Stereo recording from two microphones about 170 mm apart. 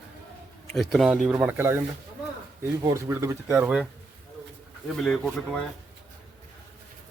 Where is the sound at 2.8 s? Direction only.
15° right (ahead or behind).